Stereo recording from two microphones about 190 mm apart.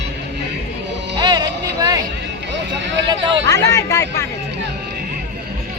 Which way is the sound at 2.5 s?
70° right (ahead or behind).